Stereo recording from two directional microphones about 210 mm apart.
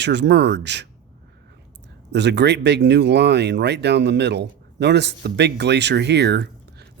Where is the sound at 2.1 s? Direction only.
55° right (ahead or behind).